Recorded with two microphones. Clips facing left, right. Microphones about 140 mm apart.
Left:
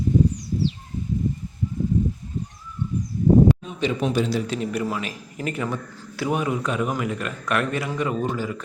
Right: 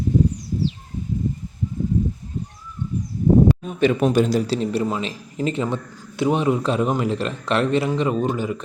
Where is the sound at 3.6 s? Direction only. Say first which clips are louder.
Right 6 dB; 50° right (ahead or behind).